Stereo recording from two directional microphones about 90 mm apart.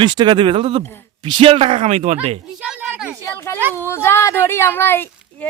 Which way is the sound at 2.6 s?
10° right (ahead or behind).